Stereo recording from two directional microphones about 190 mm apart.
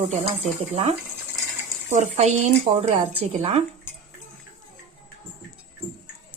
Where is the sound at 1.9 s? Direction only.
40° right (ahead or behind).